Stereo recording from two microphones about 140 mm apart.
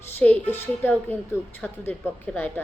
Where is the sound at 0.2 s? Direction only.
10° left (ahead or behind).